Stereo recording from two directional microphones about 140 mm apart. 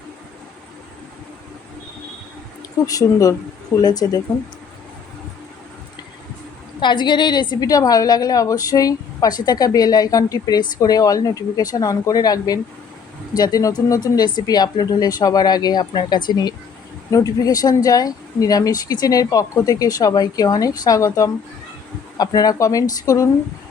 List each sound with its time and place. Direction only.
2.8 s a woman's voice: 25° left (ahead or behind)
6.7 s a woman's voice: 35° left (ahead or behind)